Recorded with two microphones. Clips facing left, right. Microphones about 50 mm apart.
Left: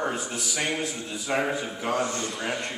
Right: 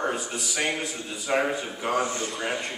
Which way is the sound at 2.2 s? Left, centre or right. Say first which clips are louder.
Right 1 dB; centre.